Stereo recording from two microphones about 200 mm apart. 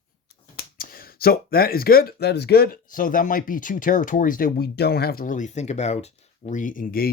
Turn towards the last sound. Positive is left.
turn(degrees=45)  # may be behind; listen again after turning